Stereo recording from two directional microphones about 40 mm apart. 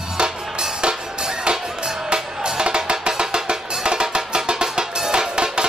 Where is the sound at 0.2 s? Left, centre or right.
Right.